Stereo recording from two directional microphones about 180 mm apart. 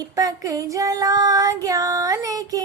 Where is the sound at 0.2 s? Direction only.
20° right (ahead or behind).